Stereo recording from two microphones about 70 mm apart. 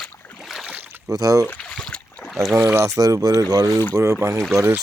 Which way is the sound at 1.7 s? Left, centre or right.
Centre.